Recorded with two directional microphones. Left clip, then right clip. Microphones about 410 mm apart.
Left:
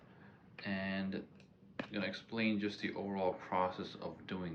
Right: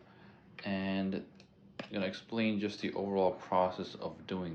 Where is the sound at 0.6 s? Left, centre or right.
Centre.